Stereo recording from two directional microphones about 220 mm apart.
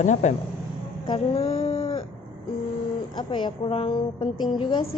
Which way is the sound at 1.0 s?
25° left (ahead or behind).